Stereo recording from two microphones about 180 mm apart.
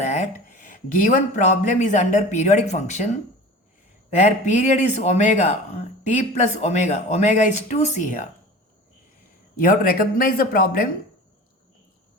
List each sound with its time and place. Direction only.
0.0 s a sound: 40° left (ahead or behind)
1.6 s speech: 45° left (ahead or behind)
9.6 s speech: 50° left (ahead or behind)